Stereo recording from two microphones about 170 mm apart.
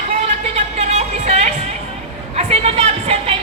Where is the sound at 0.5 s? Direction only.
40° right (ahead or behind).